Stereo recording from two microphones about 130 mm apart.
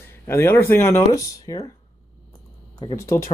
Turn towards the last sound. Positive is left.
turn(degrees=20)  # may be behind; listen again after turning